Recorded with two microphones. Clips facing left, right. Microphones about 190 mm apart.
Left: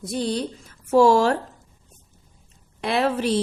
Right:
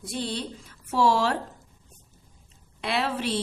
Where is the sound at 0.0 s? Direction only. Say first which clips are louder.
Left 6 dB; 40° left (ahead or behind).